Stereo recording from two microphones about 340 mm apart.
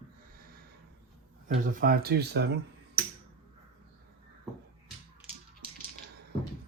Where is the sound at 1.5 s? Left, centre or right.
Right.